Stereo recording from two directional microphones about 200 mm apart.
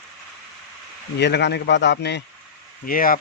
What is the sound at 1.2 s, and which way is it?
Speech, 60° left (ahead or behind).